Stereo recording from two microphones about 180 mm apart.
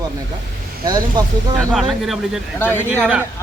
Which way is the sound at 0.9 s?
25° right (ahead or behind).